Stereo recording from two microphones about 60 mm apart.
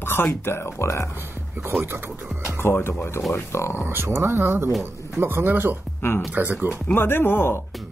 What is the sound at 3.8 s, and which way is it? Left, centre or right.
Speech, right.